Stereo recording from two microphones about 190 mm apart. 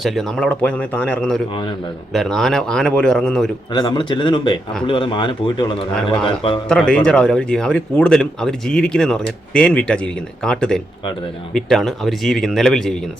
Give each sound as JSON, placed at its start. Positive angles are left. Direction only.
{"t": 0.0, "sound": "speech", "side_deg": 0}
{"t": 3.7, "sound": "speech", "side_deg": 25}
{"t": 6.7, "sound": "speech", "side_deg": 5}